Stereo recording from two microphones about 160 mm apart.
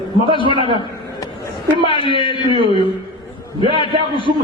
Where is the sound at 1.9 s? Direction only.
30° left (ahead or behind).